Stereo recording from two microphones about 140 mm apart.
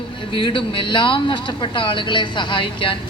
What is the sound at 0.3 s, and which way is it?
A man's voice, 35° left (ahead or behind).